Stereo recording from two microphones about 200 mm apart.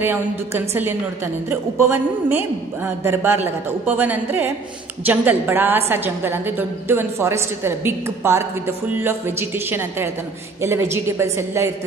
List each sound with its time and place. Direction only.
0.0 s a woman's voice: 10° right (ahead or behind)